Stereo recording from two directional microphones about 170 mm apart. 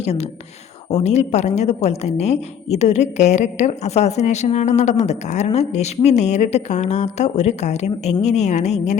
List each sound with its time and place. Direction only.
0.0 s speech: 40° left (ahead or behind)